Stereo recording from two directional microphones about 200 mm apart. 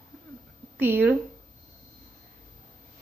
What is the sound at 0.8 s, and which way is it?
Speech, 10° right (ahead or behind).